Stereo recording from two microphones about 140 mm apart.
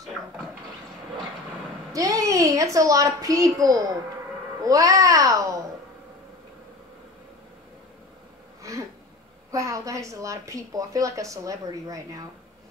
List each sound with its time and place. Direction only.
1.9 s a woman's voice: 25° right (ahead or behind)
9.5 s speech: 25° right (ahead or behind)